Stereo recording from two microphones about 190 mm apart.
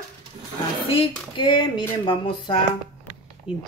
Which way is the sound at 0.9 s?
25° left (ahead or behind).